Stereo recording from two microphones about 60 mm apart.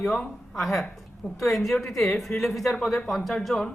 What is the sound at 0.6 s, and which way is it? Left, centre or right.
A woman's voice, centre.